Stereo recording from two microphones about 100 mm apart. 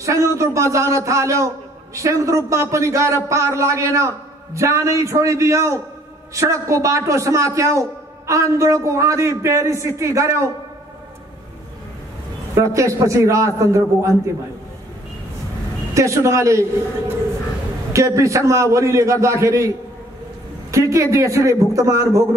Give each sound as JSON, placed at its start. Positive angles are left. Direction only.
{"t": 0.0, "sound": "a man's voice", "side_deg": -30}
{"t": 12.5, "sound": "a man's voice", "side_deg": -30}
{"t": 15.9, "sound": "a man's voice", "side_deg": -30}
{"t": 17.9, "sound": "a man's voice", "side_deg": -30}
{"t": 20.7, "sound": "a man's voice", "side_deg": -30}